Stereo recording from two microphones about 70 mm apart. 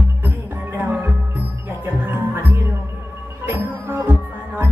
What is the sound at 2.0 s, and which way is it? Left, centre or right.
Music, right.